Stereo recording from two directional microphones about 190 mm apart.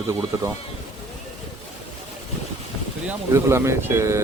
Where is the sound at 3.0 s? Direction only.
15° right (ahead or behind).